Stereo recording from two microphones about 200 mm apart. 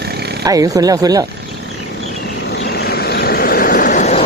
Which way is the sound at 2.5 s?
55° left (ahead or behind).